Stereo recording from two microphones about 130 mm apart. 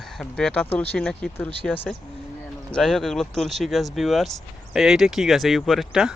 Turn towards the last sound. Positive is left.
turn(degrees=-5)  # may be behind; listen again after turning